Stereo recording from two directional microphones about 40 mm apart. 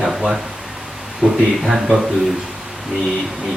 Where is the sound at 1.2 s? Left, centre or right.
Right.